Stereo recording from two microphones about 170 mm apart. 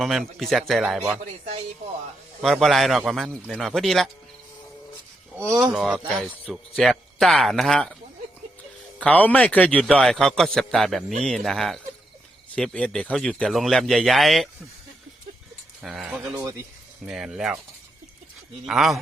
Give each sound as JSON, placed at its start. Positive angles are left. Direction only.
{"t": 0.0, "sound": "a man's voice", "side_deg": 0}
{"t": 2.4, "sound": "a man's voice", "side_deg": 0}
{"t": 5.4, "sound": "speech", "side_deg": -20}
{"t": 5.7, "sound": "a man's voice", "side_deg": -5}
{"t": 9.0, "sound": "a man's voice", "side_deg": 10}
{"t": 15.8, "sound": "a man's voice", "side_deg": 0}
{"t": 18.6, "sound": "a man's voice", "side_deg": 0}